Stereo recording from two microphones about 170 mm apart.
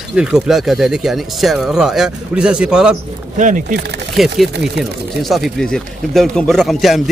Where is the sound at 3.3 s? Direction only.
50° right (ahead or behind).